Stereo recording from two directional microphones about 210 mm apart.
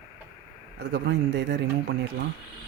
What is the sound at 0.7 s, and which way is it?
Speech, 55° right (ahead or behind).